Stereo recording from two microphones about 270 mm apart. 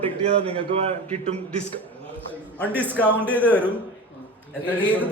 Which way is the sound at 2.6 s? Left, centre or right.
Centre.